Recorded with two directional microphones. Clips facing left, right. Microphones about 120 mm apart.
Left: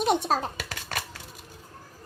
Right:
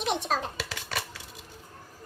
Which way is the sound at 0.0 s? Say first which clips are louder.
Left 5 dB; 40° left (ahead or behind).